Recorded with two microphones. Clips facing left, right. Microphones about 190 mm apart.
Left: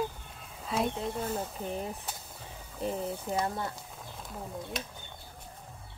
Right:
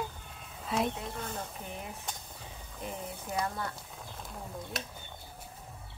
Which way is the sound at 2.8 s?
30° left (ahead or behind).